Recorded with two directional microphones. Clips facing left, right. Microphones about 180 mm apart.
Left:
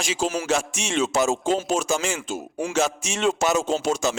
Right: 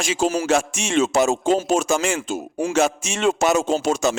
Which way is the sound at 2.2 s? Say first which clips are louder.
Right 4 dB; 45° right (ahead or behind).